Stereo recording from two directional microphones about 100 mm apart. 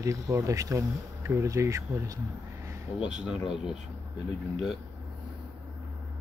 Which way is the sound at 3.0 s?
10° right (ahead or behind).